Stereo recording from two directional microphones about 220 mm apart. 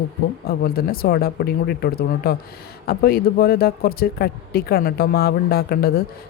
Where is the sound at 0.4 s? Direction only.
45° left (ahead or behind).